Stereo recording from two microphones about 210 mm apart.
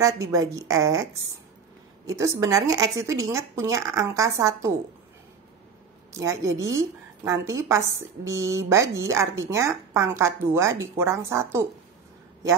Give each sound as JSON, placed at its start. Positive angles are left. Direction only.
{"t": 0.0, "sound": "a woman's voice", "side_deg": -15}
{"t": 2.0, "sound": "a woman's voice", "side_deg": -15}
{"t": 6.1, "sound": "a woman's voice", "side_deg": -15}